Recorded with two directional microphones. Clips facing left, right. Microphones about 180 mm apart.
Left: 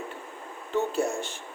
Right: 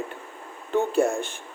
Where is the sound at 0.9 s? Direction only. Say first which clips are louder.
Right 5 dB; 55° right (ahead or behind).